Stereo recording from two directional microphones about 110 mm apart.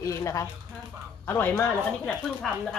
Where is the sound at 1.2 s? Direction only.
20° left (ahead or behind).